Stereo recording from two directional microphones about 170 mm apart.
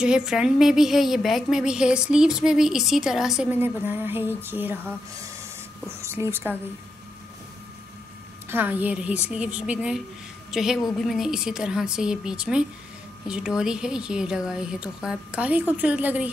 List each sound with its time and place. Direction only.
0.0 s a woman's voice: 5° right (ahead or behind)
5.9 s speech: 15° right (ahead or behind)
8.5 s a woman's voice: 10° right (ahead or behind)